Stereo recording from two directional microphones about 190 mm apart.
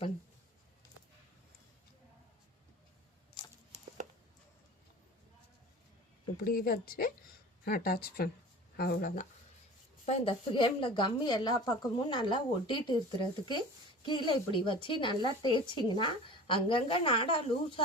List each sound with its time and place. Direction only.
6.4 s speech: 50° left (ahead or behind)
10.1 s a woman's voice: 30° left (ahead or behind)